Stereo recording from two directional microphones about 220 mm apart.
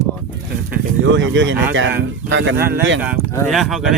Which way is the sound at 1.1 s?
55° right (ahead or behind).